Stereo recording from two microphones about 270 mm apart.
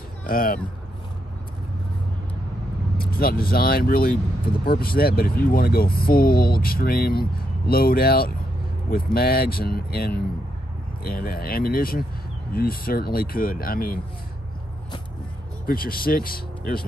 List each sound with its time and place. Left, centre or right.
0.3 s speech: left
3.1 s speech: left
15.6 s speech: left